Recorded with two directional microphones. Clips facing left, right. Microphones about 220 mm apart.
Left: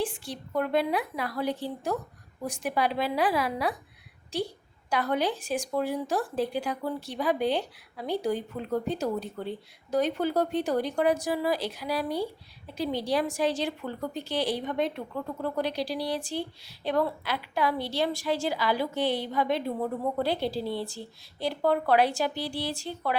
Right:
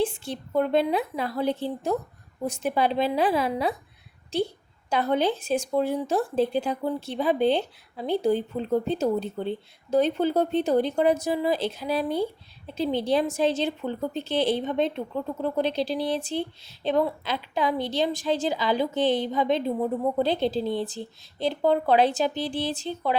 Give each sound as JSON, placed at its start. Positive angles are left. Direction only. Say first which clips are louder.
{"t": 0.0, "sound": "a woman's voice", "louder": "right 5 dB", "side_deg": -25}